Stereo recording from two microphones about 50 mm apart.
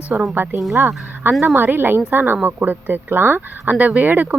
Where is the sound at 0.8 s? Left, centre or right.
Right.